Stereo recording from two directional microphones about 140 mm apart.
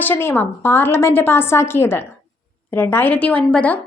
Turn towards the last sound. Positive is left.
turn(degrees=10)  # may be behind; listen again after turning